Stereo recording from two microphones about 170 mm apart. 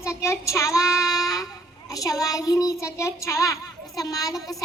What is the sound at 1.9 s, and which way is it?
Child singing, 20° left (ahead or behind).